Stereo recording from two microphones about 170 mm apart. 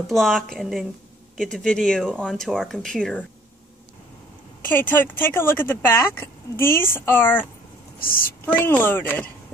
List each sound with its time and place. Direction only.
0.0 s speech: centre (ahead or behind)
4.6 s speech: 10° left (ahead or behind)
8.0 s a woman's voice: 55° left (ahead or behind)
8.5 s speech: 10° left (ahead or behind)